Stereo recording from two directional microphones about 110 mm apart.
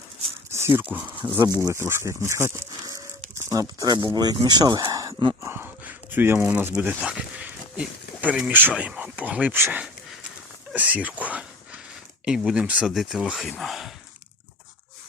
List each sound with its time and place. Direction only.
0.5 s speech: 20° right (ahead or behind)
5.4 s speech: 20° right (ahead or behind)
10.7 s a sound: 15° right (ahead or behind)
12.2 s speech: 5° right (ahead or behind)